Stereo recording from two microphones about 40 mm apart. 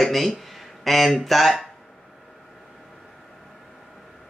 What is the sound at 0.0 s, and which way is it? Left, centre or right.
Speech, centre.